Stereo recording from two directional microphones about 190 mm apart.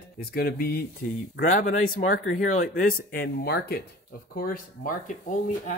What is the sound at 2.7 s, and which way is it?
Speech, 50° left (ahead or behind).